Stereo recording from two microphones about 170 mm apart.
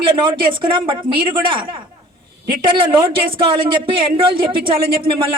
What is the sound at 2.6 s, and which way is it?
Speech, 30° right (ahead or behind).